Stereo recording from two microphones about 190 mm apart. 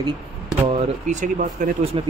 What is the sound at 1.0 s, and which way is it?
Speech, 40° right (ahead or behind).